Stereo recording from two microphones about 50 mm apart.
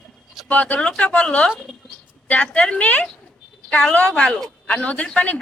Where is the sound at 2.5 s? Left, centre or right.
Left.